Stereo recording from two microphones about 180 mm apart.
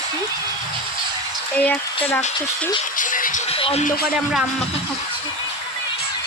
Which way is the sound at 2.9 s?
50° left (ahead or behind).